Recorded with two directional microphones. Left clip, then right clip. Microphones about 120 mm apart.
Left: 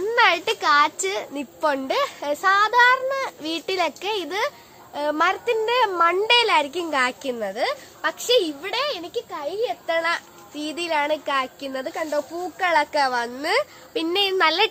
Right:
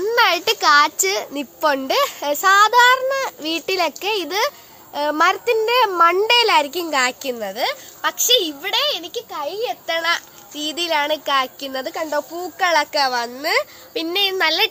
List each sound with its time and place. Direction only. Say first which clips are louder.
0.0 s a child's voice: right 2 dB; 60° right (ahead or behind)
6.8 s a child's voice: right 3 dB; 15° right (ahead or behind)
7.1 s a child's voice: right 2 dB; centre (ahead or behind)
9.8 s a child's voice: right 5 dB; 15° right (ahead or behind); by 12.6 s 35° right (ahead or behind)
12.6 s a child's voice: right 3 dB; 15° right (ahead or behind)
12.9 s a child's voice: right 2 dB; 5° left (ahead or behind); by 14.7 s 25° left (ahead or behind)